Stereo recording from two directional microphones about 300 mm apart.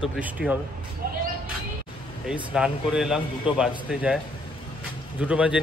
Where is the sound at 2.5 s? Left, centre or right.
Centre.